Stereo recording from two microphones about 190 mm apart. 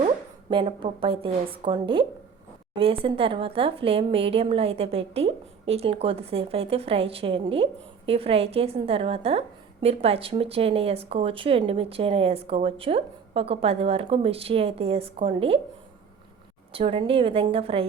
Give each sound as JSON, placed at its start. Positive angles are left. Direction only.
{"t": 0.5, "sound": "a woman's voice", "side_deg": -25}
{"t": 16.7, "sound": "a woman's voice", "side_deg": -30}